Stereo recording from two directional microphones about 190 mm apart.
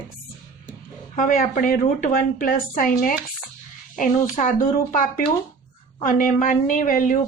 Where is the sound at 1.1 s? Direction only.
45° left (ahead or behind).